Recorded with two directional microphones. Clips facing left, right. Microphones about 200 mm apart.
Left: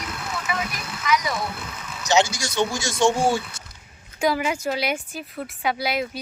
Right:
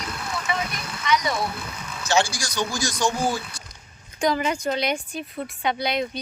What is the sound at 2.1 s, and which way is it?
Speech, 20° left (ahead or behind).